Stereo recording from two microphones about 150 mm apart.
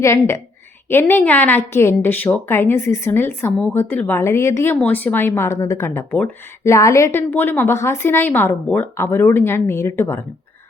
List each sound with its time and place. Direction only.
0.0 s a woman's voice: 20° left (ahead or behind)